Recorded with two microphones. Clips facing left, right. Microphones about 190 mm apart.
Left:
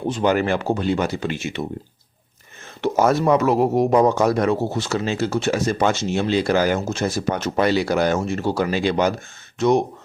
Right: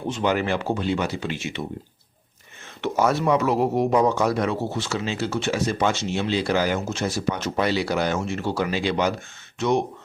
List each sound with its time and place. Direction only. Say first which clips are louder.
0.1 s speech: left 3 dB; 45° left (ahead or behind)
2.8 s speech: left 4 dB; 45° left (ahead or behind)